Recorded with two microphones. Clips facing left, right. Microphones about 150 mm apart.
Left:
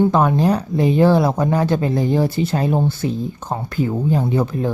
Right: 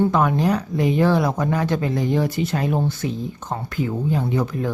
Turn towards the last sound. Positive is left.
turn(degrees=30)  # may be behind; listen again after turning